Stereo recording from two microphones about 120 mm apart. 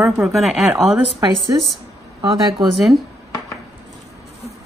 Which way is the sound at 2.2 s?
45° right (ahead or behind).